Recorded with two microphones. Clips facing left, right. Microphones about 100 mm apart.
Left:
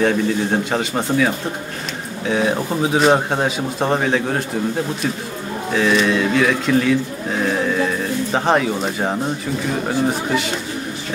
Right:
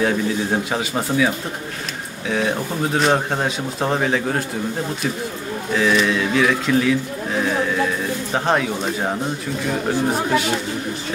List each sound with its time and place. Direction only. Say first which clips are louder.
0.0 s a man's voice: left 2 dB; 5° right (ahead or behind)
5.7 s a man's voice: left 1 dB; centre (ahead or behind)